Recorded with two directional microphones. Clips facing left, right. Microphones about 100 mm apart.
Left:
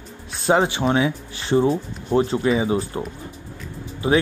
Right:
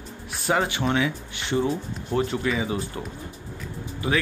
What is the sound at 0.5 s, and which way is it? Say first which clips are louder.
A man's voice: left 5 dB; 30° left (ahead or behind).